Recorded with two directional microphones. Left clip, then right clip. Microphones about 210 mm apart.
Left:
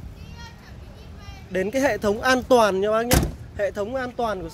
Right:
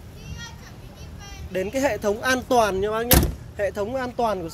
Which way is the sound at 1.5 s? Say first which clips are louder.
Left 2 dB; 40° left (ahead or behind).